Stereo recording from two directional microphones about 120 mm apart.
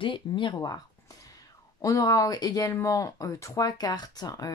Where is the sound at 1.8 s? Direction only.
30° left (ahead or behind).